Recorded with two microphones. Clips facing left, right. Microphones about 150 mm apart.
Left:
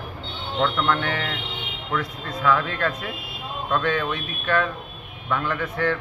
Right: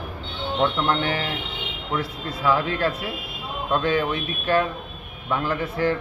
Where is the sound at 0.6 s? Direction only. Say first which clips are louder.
Even; 30° right (ahead or behind).